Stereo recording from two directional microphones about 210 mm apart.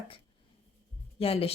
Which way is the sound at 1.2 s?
25° left (ahead or behind).